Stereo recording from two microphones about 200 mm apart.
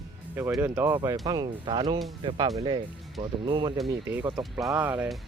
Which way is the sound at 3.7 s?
5° right (ahead or behind).